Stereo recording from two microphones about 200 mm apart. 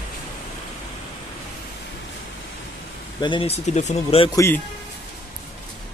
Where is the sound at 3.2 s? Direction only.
25° left (ahead or behind).